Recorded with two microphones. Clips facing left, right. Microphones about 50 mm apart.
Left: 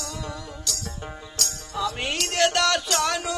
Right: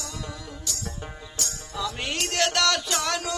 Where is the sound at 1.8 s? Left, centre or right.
Centre.